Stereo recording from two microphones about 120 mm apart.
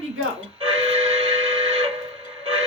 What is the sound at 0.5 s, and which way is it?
Steam whistle, 55° right (ahead or behind).